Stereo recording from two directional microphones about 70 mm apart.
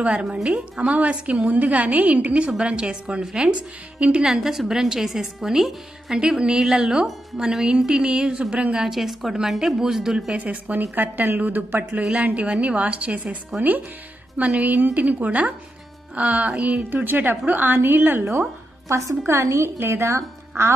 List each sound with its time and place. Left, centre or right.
0.2 s a woman's voice: centre
4.3 s a woman's voice: centre
10.3 s a woman's voice: right
16.9 s a woman's voice: right
18.9 s a woman's voice: right